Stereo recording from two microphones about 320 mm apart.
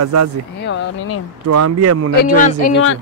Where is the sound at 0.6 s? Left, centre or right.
Left.